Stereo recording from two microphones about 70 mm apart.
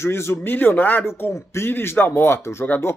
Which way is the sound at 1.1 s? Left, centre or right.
Left.